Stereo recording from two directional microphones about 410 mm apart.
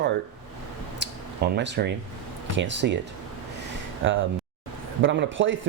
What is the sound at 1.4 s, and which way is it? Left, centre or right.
Speech, right.